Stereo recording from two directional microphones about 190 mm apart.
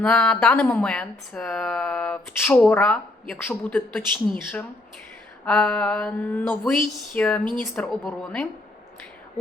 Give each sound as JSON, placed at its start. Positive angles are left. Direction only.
{"t": 0.0, "sound": "speech", "side_deg": 5}